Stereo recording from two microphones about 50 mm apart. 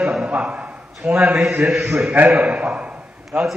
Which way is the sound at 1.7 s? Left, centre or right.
Right.